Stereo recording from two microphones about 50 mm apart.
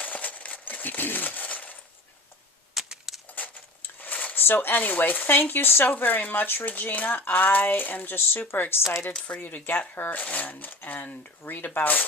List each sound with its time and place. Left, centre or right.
0.0 s coin: left
2.7 s a sound: centre
3.2 s speech: left
9.3 s speech: left